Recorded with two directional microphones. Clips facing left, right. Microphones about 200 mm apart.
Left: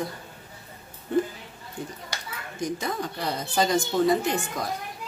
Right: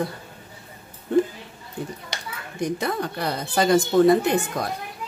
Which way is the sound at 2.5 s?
65° right (ahead or behind).